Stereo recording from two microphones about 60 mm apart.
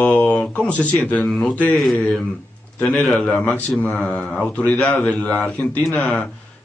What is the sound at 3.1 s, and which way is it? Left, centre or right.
Speech, left.